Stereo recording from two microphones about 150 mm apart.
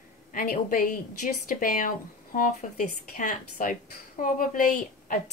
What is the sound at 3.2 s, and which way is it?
A woman's voice, 60° left (ahead or behind).